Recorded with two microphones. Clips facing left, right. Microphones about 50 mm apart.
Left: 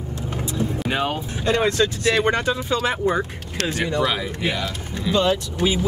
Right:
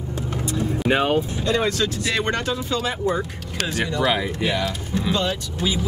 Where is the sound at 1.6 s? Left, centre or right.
Left.